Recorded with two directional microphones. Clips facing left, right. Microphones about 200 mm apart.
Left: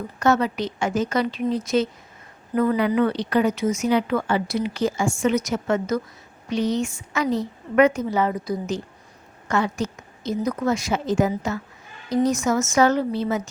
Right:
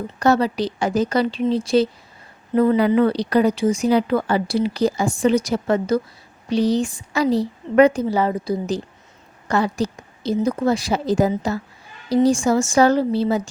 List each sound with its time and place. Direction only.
0.2 s speech: 35° right (ahead or behind)